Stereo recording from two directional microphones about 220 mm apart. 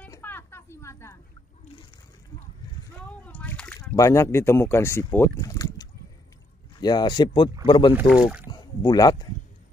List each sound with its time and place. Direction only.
0.0 s a sound: 10° left (ahead or behind)
3.3 s splash: 5° left (ahead or behind)
3.9 s speech: 15° left (ahead or behind)
7.9 s speech: 5° right (ahead or behind)
8.5 s speech: 20° left (ahead or behind)